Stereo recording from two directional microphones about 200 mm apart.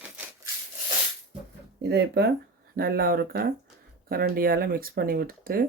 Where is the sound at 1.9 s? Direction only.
55° right (ahead or behind).